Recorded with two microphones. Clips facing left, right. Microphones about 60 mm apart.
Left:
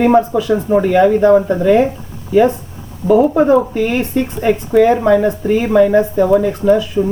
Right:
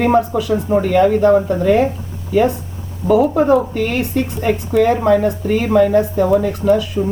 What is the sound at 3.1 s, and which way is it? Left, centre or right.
Speech, centre.